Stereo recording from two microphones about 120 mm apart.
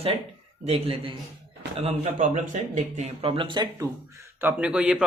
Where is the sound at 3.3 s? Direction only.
45° right (ahead or behind).